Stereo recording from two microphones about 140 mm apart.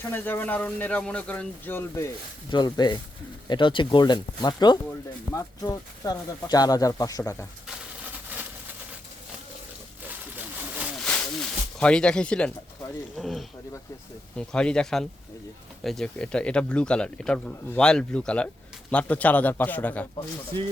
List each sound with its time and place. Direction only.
0.1 s speech: 15° left (ahead or behind)
2.5 s speech: 30° left (ahead or behind)
7.7 s a sound: 10° right (ahead or behind)
11.0 s snake: 5° left (ahead or behind)
13.1 s speech: centre (ahead or behind)